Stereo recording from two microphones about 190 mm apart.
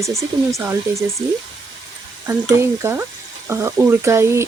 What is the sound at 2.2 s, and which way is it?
Speech, 15° right (ahead or behind).